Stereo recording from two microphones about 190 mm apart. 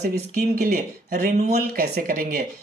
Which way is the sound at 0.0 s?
60° right (ahead or behind).